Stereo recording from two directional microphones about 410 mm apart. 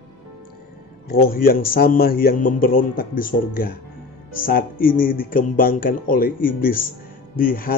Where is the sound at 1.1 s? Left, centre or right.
Left.